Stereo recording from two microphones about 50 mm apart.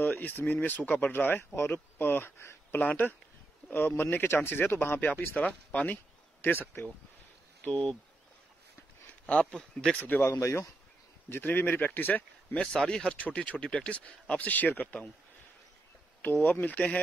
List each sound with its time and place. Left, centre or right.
0.0 s speech: left
2.8 s speech: left
3.7 s speech: left
5.3 s speech: left
6.4 s speech: left
9.3 s speech: left
9.6 s speech: centre
9.9 s speech: left
10.4 s speech: left
11.4 s speech: left
12.5 s speech: centre
13.2 s speech: left
16.2 s speech: left